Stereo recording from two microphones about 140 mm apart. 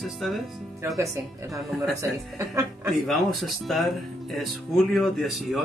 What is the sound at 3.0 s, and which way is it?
Speech, centre (ahead or behind).